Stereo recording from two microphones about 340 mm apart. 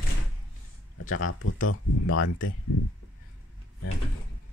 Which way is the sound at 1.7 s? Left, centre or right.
Left.